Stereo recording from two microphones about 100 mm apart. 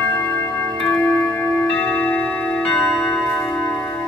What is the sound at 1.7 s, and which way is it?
Tick-tock, 15° left (ahead or behind).